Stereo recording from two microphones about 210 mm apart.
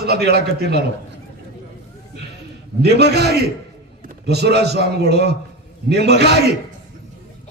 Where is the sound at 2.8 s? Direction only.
50° right (ahead or behind).